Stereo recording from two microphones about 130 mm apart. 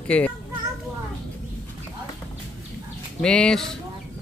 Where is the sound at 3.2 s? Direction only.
5° left (ahead or behind).